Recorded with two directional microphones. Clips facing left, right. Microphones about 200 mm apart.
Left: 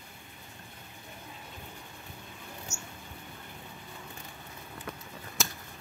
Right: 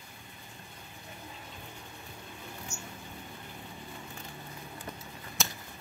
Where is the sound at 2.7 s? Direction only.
45° left (ahead or behind).